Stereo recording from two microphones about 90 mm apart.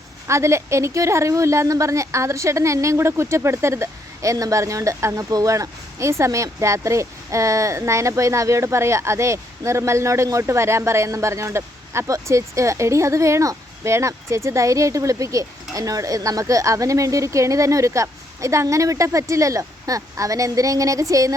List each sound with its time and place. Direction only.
0.3 s a woman's voice: 35° right (ahead or behind)